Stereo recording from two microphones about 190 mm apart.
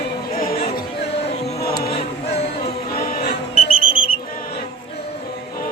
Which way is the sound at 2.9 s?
50° left (ahead or behind).